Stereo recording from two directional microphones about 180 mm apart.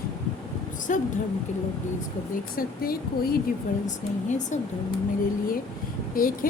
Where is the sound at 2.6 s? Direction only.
55° left (ahead or behind).